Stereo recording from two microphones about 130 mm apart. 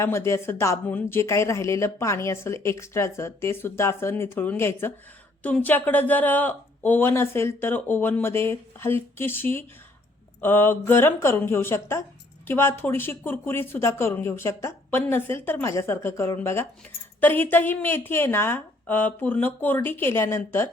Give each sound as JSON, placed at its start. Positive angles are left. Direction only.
{"t": 0.0, "sound": "speech", "side_deg": 20}